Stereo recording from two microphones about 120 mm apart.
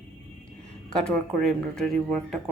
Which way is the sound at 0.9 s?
5° left (ahead or behind).